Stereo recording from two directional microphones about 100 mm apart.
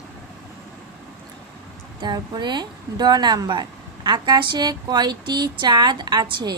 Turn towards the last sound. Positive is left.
turn(degrees=-45)  # may be behind; listen again after turning